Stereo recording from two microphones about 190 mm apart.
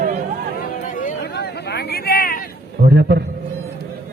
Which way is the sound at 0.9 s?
45° left (ahead or behind).